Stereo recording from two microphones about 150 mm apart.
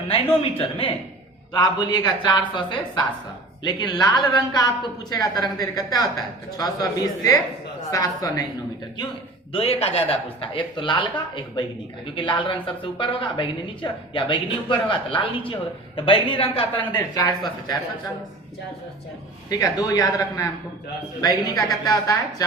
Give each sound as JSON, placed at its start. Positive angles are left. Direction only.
{"t": 0.5, "sound": "a woman's voice", "side_deg": 40}
{"t": 1.5, "sound": "a woman's voice", "side_deg": 30}
{"t": 9.5, "sound": "a woman's voice", "side_deg": 40}
{"t": 12.1, "sound": "a woman's voice", "side_deg": 35}
{"t": 16.7, "sound": "a woman's voice", "side_deg": 20}
{"t": 19.5, "sound": "a woman's voice", "side_deg": 25}